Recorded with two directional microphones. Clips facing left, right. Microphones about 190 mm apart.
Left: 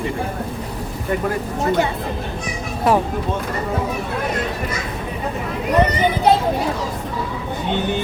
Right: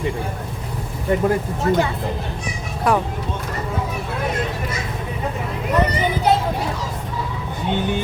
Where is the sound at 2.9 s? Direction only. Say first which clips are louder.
Left 2 dB; 25° left (ahead or behind).